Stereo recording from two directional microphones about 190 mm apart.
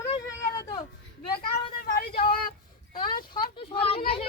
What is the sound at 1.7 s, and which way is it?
Vehicle, 50° left (ahead or behind).